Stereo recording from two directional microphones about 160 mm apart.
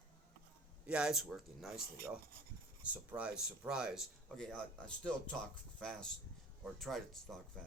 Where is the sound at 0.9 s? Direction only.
5° right (ahead or behind).